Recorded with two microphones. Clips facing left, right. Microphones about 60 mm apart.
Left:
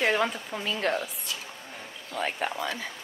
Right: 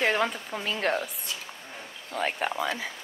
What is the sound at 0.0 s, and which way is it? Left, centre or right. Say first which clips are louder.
Speech: even; centre.